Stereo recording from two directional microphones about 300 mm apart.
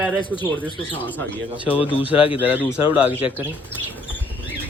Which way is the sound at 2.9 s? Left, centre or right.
Centre.